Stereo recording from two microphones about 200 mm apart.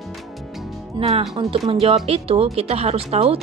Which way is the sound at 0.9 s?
30° right (ahead or behind).